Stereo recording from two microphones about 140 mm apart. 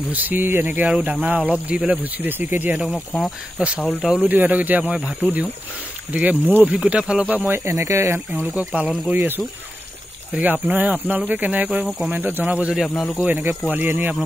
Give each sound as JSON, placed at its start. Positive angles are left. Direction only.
{"t": 0.1, "sound": "speech", "side_deg": -10}
{"t": 3.1, "sound": "speech", "side_deg": 0}
{"t": 3.5, "sound": "speech", "side_deg": -10}
{"t": 4.3, "sound": "speech", "side_deg": -10}
{"t": 9.1, "sound": "speech", "side_deg": -15}
{"t": 13.3, "sound": "speech", "side_deg": -15}